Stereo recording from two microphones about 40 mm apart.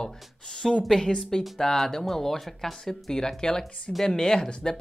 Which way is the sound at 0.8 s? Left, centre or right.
Centre.